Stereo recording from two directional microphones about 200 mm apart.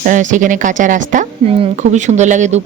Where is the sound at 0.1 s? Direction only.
40° right (ahead or behind).